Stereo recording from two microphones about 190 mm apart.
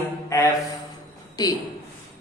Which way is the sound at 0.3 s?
15° left (ahead or behind).